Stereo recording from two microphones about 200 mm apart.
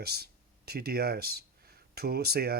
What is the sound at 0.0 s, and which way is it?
Speech, 50° right (ahead or behind).